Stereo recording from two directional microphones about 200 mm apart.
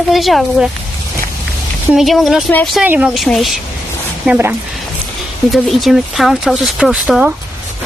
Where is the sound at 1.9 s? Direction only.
Centre (ahead or behind).